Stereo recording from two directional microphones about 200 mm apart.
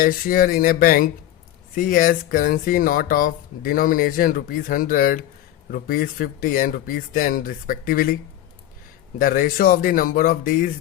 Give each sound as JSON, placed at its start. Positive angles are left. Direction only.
{"t": 0.0, "sound": "speech", "side_deg": 45}